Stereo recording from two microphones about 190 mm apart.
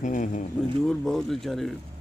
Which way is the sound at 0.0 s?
40° left (ahead or behind).